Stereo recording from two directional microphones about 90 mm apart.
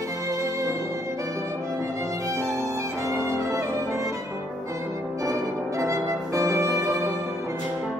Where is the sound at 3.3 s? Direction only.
35° right (ahead or behind).